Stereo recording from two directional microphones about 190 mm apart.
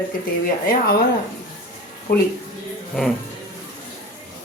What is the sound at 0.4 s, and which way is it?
Speech, 50° left (ahead or behind).